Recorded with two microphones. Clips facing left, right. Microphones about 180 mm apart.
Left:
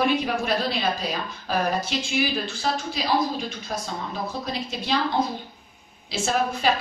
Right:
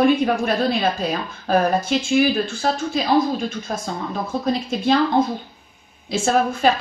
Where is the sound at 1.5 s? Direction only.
50° right (ahead or behind).